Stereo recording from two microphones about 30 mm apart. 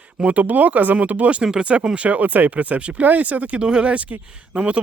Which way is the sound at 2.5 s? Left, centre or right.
Right.